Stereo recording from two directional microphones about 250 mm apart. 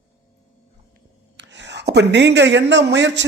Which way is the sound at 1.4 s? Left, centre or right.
Right.